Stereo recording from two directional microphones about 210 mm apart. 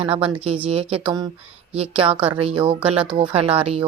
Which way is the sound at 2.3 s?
25° right (ahead or behind).